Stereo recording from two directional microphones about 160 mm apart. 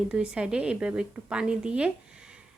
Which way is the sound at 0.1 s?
5° right (ahead or behind).